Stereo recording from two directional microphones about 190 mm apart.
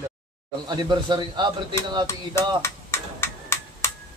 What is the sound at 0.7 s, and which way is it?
Speech, 25° right (ahead or behind).